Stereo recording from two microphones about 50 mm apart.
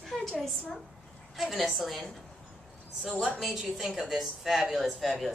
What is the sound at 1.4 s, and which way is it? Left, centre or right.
Speech, centre.